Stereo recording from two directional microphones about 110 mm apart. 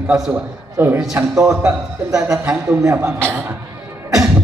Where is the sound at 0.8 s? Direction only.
20° right (ahead or behind).